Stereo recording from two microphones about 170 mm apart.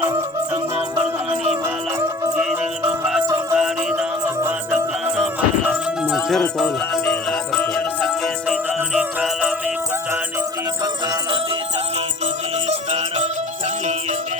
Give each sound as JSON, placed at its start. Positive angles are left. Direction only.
{"t": 0.1, "sound": "music", "side_deg": -20}
{"t": 1.6, "sound": "music", "side_deg": -10}
{"t": 5.1, "sound": "music", "side_deg": -5}
{"t": 11.0, "sound": "music", "side_deg": -25}
{"t": 11.9, "sound": "music", "side_deg": -40}